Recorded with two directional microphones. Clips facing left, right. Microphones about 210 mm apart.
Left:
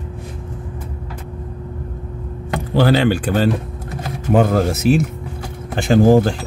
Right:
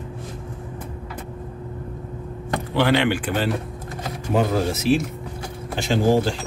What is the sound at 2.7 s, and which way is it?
Speech, 35° left (ahead or behind).